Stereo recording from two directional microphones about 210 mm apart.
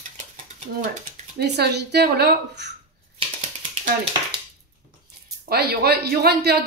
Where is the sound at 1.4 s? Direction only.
50° right (ahead or behind).